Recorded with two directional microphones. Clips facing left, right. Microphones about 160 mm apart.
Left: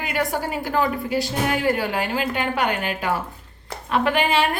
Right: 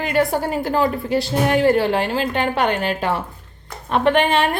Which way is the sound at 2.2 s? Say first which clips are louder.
Right 3 dB; 35° right (ahead or behind).